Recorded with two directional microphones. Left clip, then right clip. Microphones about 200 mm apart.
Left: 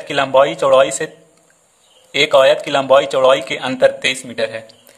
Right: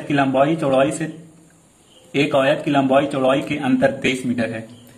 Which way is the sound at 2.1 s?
45° left (ahead or behind).